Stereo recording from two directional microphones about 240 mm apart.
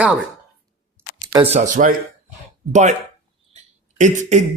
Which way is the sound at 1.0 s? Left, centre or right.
Centre.